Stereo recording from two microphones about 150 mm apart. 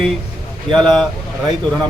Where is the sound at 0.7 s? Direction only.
35° right (ahead or behind).